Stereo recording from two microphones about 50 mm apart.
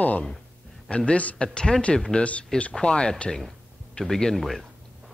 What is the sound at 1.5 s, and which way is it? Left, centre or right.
Speech, centre.